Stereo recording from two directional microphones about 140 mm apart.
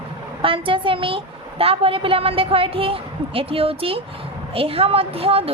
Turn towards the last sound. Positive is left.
turn(degrees=-45)  # may be behind; listen again after turning